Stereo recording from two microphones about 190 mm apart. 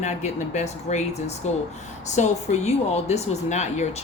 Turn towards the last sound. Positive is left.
turn(degrees=35)  # may be behind; listen again after turning